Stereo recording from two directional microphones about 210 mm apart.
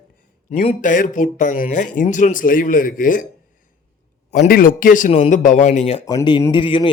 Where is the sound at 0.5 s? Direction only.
35° left (ahead or behind).